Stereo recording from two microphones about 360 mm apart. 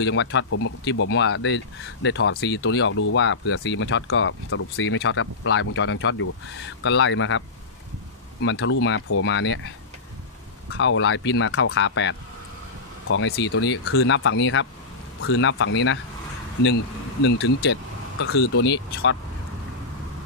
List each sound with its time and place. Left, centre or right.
0.0 s speech: left
10.8 s speech: left
18.2 s speech: left